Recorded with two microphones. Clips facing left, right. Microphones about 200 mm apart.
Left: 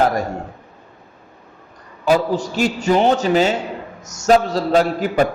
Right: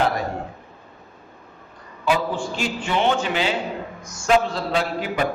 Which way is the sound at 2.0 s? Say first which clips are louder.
Left 5 dB; 40° left (ahead or behind).